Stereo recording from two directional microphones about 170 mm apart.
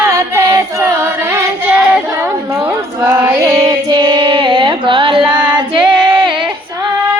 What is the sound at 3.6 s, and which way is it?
Carnatic music, 20° right (ahead or behind).